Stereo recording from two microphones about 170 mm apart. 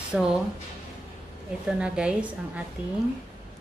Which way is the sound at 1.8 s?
5° right (ahead or behind).